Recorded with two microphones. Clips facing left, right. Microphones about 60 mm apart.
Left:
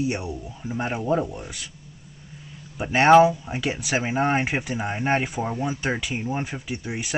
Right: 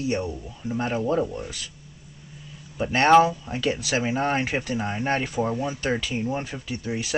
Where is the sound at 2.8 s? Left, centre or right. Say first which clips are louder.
Left 2 dB; centre.